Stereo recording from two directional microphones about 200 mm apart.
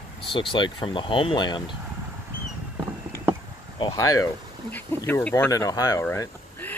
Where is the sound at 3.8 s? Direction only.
15° left (ahead or behind).